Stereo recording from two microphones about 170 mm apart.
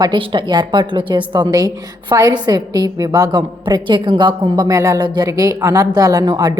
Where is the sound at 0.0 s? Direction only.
30° right (ahead or behind).